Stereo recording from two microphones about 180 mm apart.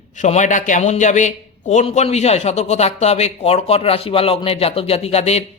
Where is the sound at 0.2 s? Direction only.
40° left (ahead or behind).